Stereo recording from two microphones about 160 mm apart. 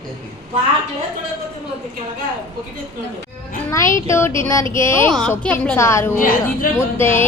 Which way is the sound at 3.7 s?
20° left (ahead or behind).